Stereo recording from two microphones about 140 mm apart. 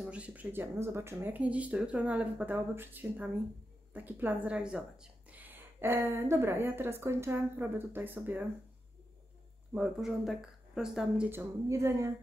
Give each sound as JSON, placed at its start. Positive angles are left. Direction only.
{"t": 0.0, "sound": "speech", "side_deg": -10}
{"t": 9.8, "sound": "speech", "side_deg": 0}
{"t": 11.2, "sound": "a woman's voice", "side_deg": -20}